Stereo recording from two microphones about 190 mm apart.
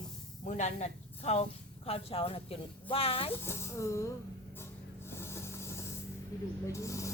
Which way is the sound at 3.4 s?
15° left (ahead or behind).